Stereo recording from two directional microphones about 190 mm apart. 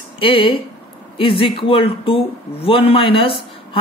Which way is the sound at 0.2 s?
30° left (ahead or behind).